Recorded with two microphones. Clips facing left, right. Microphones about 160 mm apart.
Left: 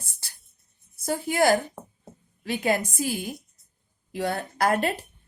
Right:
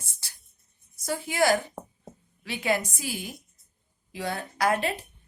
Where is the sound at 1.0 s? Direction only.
50° left (ahead or behind).